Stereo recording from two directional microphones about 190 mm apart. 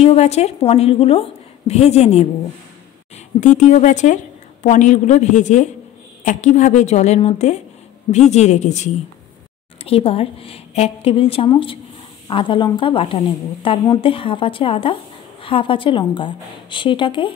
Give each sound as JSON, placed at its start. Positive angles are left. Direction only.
{"t": 0.0, "sound": "a woman's voice", "side_deg": 35}
{"t": 3.3, "sound": "a woman's voice", "side_deg": 40}